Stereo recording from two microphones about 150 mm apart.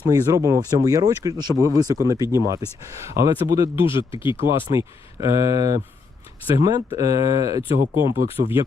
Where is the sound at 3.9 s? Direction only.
35° left (ahead or behind).